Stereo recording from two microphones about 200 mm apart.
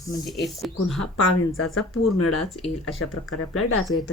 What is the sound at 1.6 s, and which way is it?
Speech, 80° left.